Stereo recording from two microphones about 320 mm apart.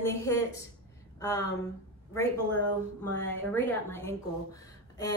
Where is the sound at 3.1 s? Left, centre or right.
Centre.